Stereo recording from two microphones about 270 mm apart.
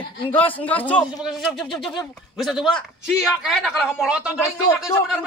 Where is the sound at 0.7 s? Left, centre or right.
Centre.